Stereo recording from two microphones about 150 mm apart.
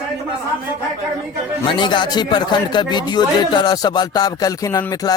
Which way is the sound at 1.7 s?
30° left (ahead or behind).